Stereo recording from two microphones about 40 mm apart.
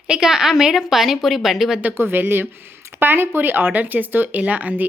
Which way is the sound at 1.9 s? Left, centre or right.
Right.